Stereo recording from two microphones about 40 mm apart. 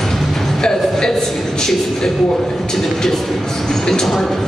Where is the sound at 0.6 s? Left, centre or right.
Centre.